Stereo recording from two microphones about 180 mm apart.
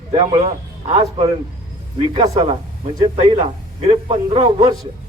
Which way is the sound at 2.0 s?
35° right (ahead or behind).